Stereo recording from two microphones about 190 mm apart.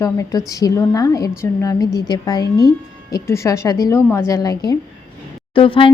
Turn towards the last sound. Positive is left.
turn(degrees=25)  # may be behind; listen again after turning